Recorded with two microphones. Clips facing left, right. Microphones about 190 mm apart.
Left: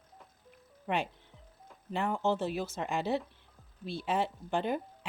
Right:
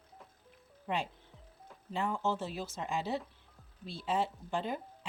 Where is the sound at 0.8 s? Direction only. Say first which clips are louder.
Left 3 dB; 65° left (ahead or behind).